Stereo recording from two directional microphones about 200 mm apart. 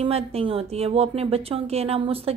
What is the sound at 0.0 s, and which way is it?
A woman's voice, 30° right (ahead or behind).